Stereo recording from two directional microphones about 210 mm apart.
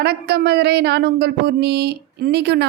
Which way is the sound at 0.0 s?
50° right (ahead or behind).